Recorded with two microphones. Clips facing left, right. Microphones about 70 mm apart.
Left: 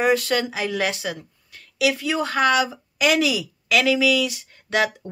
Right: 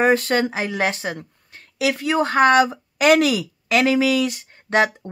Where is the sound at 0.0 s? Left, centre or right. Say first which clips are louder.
Right 3 dB; right.